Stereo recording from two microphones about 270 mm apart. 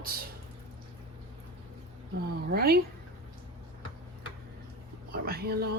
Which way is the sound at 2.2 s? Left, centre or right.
Right.